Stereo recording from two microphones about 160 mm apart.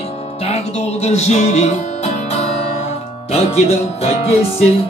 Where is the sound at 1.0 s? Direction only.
45° left (ahead or behind).